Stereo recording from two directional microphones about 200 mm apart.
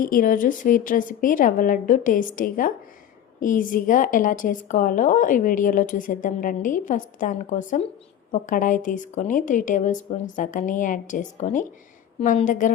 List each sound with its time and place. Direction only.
0.0 s a woman's voice: 45° left (ahead or behind)